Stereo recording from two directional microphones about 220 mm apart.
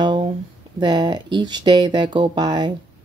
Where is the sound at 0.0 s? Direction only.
20° right (ahead or behind).